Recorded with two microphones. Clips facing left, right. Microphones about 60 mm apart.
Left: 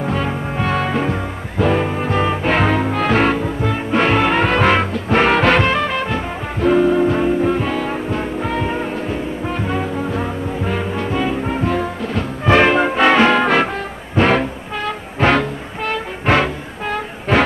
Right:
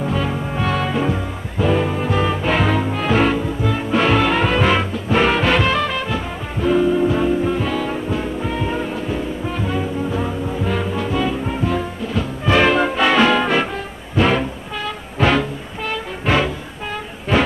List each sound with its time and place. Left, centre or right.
0.0 s music: left
2.4 s music: left
2.9 s music: left
3.2 s music: left
4.5 s music: left
5.6 s music: left
7.2 s music: left
10.2 s brass instrument: left
12.1 s music: left
12.6 s music: left
14.4 s music: left
15.3 s music: left
16.8 s music: left